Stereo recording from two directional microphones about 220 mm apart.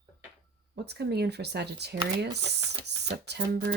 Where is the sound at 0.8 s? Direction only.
50° right (ahead or behind).